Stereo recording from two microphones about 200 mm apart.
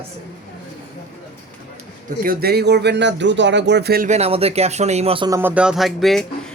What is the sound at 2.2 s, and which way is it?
Speech, 50° right (ahead or behind).